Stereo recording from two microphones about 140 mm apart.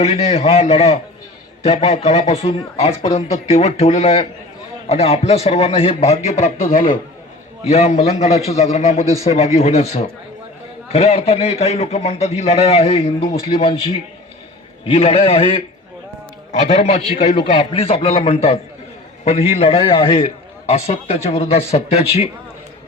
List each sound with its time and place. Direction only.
0.0 s a man's voice: 50° left (ahead or behind)
14.8 s a man's voice: 45° left (ahead or behind)